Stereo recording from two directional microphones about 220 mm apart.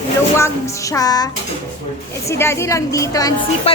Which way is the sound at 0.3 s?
15° left (ahead or behind).